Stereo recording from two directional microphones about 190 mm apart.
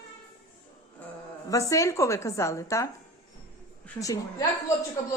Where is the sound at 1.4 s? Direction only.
15° left (ahead or behind).